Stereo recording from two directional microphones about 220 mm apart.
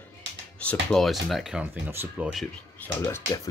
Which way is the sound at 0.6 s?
5° left (ahead or behind).